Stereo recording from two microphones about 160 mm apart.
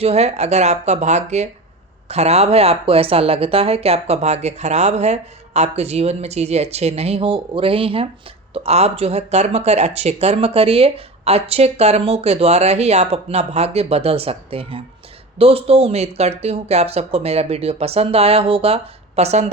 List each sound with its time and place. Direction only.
0.0 s speech: 40° right (ahead or behind)